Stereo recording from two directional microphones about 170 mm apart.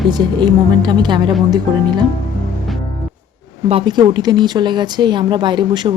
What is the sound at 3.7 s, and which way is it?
Speech, 30° right (ahead or behind).